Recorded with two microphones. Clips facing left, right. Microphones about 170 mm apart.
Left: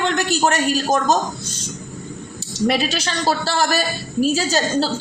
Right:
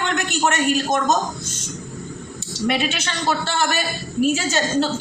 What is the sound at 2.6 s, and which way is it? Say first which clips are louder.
A woman's voice: left 3 dB; 35° left (ahead or behind).